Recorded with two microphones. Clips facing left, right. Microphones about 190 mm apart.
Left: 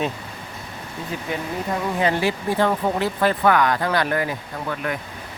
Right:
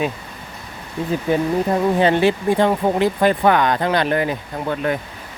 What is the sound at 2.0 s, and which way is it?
Speech, 25° right (ahead or behind).